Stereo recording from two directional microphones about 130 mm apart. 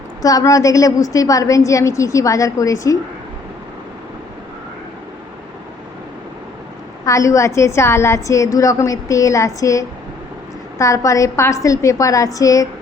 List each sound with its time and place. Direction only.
0.2 s a woman's voice: 30° left (ahead or behind)
7.0 s a woman's voice: 25° left (ahead or behind)